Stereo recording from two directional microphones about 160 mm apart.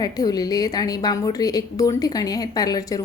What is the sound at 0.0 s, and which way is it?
A woman's voice, 25° left (ahead or behind).